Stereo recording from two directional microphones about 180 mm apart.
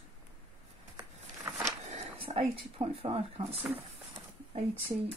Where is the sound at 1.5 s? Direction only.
15° right (ahead or behind).